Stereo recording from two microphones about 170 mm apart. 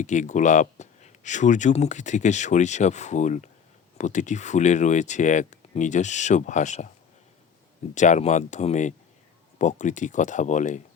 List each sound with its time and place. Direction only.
0.0 s speech: 45° left (ahead or behind)
7.9 s speech: 45° left (ahead or behind)